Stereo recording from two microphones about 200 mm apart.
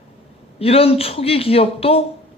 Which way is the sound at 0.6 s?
30° left (ahead or behind).